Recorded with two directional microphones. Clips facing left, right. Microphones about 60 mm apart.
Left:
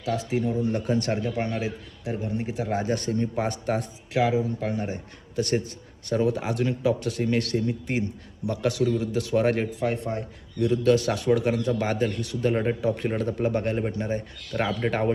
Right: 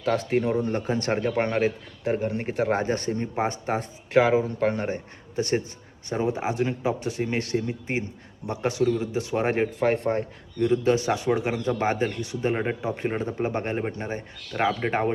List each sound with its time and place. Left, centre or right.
0.0 s speech: right
0.7 s a man's voice: right
4.1 s speech: right
5.4 s a man's voice: right
9.8 s a man's voice: right